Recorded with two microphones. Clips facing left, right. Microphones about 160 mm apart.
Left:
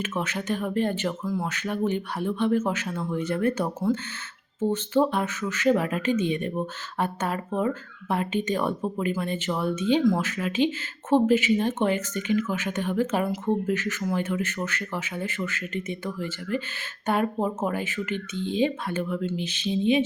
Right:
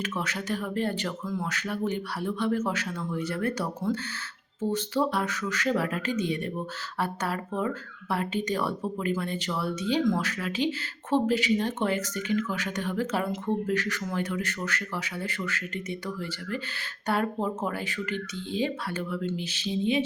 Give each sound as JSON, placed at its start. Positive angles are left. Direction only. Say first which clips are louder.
{"t": 0.0, "sound": "speech", "louder": "left 3 dB", "side_deg": 25}
{"t": 4.9, "sound": "speech", "louder": "left 6 dB", "side_deg": 20}